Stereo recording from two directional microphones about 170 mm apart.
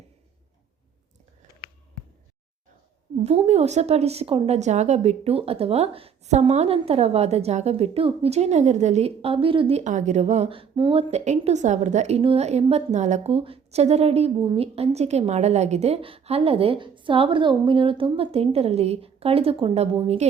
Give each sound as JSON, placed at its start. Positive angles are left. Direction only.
{"t": 3.2, "sound": "a woman's voice", "side_deg": -40}